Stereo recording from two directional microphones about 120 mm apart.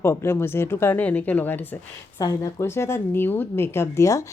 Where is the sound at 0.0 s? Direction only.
20° left (ahead or behind).